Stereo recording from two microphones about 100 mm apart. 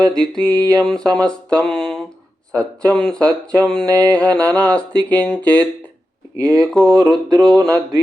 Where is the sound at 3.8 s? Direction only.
35° right (ahead or behind).